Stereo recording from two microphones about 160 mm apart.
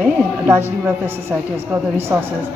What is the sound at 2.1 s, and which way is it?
Speech, 15° right (ahead or behind).